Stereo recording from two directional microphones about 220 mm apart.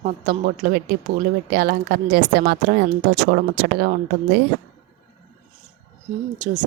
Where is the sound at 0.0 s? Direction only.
40° right (ahead or behind).